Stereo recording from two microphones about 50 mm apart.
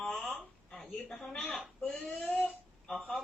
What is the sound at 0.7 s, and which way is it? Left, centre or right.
A woman's voice, centre.